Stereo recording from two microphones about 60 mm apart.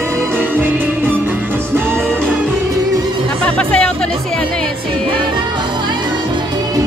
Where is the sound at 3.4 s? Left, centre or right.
Centre.